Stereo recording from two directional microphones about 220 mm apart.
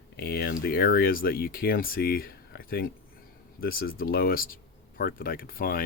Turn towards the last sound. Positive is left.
turn(degrees=40)  # may be behind; listen again after turning